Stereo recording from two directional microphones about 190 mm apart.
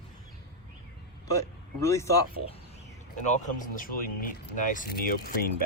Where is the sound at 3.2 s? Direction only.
40° left (ahead or behind).